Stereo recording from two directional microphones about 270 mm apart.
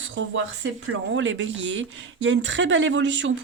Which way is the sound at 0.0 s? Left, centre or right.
Right.